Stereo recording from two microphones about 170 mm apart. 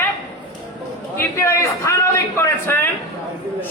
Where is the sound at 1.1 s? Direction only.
15° left (ahead or behind).